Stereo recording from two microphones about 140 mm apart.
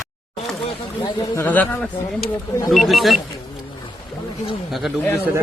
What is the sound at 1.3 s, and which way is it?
Speech, 15° left (ahead or behind).